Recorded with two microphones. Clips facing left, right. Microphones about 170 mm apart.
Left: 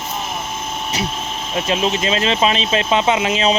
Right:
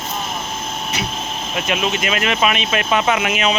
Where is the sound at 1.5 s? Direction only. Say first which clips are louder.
Left 2 dB; 30° left (ahead or behind).